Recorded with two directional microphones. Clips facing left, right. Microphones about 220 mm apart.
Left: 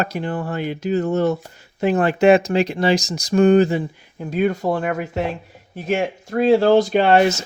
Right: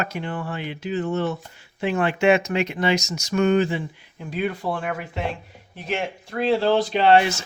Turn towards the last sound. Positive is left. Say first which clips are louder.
# left 3 dB
turn(degrees=45)  # may be behind; listen again after turning